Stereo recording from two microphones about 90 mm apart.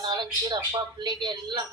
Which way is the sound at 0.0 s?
55° right (ahead or behind).